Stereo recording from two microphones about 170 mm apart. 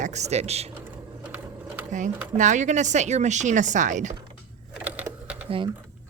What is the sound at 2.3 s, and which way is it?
Speech, 45° right (ahead or behind).